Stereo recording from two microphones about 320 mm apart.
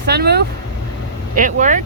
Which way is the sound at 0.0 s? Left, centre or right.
Right.